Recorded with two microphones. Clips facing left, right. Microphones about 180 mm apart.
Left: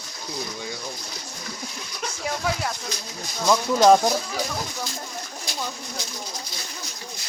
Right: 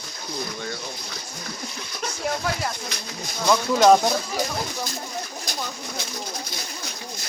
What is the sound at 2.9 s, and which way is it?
Speech, 65° right (ahead or behind).